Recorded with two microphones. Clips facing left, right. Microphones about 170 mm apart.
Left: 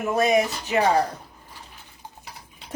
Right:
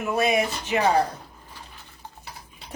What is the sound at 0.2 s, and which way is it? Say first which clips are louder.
Speech: left 3 dB; 40° left (ahead or behind).